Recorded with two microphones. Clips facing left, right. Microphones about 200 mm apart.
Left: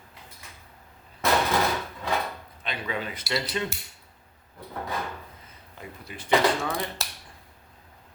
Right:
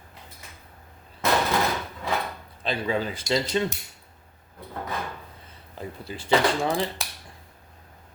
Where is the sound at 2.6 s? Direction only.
30° right (ahead or behind).